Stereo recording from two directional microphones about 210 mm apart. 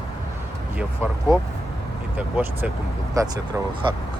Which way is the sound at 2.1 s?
10° right (ahead or behind).